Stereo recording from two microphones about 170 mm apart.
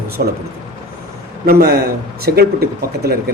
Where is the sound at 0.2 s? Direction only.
60° right (ahead or behind).